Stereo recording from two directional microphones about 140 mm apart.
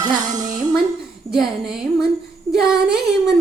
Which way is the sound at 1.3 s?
5° right (ahead or behind).